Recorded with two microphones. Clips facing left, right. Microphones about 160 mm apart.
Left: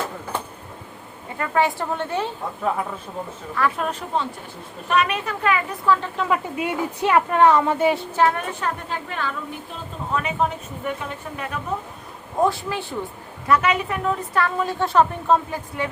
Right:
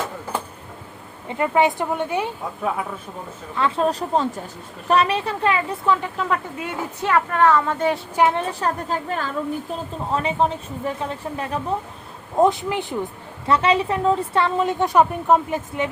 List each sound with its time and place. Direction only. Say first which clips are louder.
1.4 s speech: right 3 dB; 20° right (ahead or behind)
3.5 s a woman's voice: right 3 dB; 25° right (ahead or behind)
6.6 s speech: left 4 dB; 15° left (ahead or behind)
8.1 s speech: right 1 dB; 15° right (ahead or behind)
8.4 s speech: right 3 dB; 35° right (ahead or behind)
12.4 s a woman's voice: right 3 dB; 20° right (ahead or behind)
13.5 s a woman's voice: right 2 dB; 30° right (ahead or behind)